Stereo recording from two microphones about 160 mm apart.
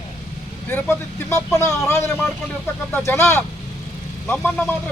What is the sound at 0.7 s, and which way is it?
Speech, 15° left (ahead or behind).